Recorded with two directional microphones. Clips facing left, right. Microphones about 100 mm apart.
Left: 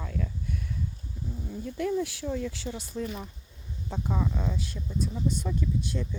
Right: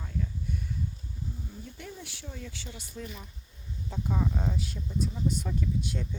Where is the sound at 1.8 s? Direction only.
75° left (ahead or behind).